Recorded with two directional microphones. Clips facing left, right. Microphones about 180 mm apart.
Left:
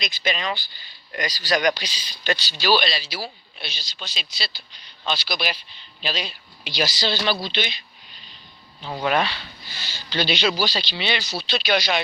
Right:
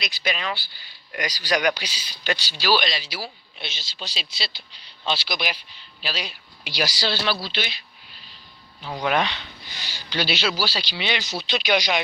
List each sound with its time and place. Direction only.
0.0 s speech: 5° right (ahead or behind); by 3.9 s 20° right (ahead or behind)
4.0 s speech: 35° right (ahead or behind)
5.4 s speech: 10° right (ahead or behind)
7.4 s a sound: 5° right (ahead or behind)
9.2 s speech: 20° right (ahead or behind)